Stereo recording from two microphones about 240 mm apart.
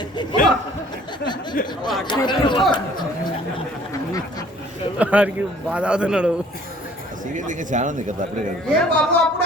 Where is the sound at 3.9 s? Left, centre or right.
Centre.